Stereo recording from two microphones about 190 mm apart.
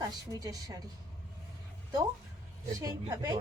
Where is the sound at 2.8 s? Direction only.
15° right (ahead or behind).